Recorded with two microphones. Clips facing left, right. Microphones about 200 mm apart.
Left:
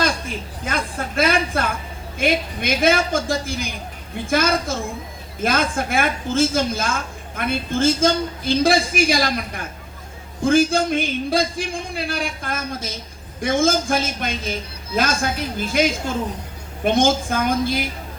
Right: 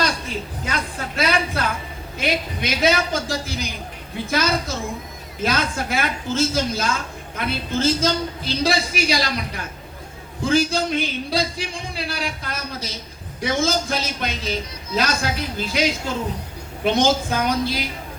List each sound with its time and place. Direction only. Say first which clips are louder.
0.0 s a woman's voice: left 1 dB; 50° left (ahead or behind)